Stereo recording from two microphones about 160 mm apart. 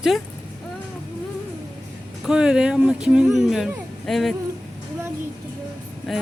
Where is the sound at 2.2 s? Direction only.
5° right (ahead or behind).